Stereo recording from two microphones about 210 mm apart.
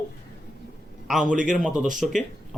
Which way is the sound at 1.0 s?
5° right (ahead or behind).